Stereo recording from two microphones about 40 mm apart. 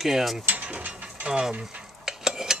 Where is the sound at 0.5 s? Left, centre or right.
Right.